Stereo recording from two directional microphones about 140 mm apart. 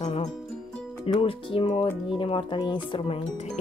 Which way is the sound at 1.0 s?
40° left (ahead or behind).